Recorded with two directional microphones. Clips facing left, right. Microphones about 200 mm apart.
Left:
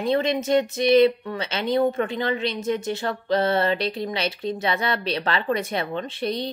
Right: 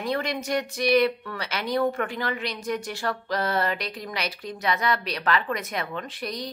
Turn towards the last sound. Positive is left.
turn(degrees=25)  # may be behind; listen again after turning